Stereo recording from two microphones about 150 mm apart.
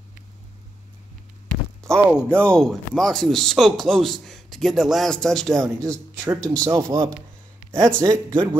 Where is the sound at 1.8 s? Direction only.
5° left (ahead or behind).